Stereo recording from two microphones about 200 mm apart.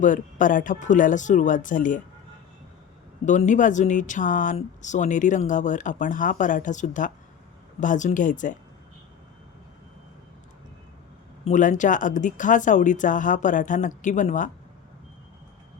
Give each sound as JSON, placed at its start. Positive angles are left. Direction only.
{"t": 0.0, "sound": "speech", "side_deg": 40}
{"t": 3.2, "sound": "speech", "side_deg": 40}
{"t": 11.4, "sound": "speech", "side_deg": 40}